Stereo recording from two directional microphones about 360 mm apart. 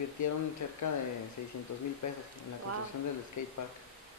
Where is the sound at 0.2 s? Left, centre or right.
Left.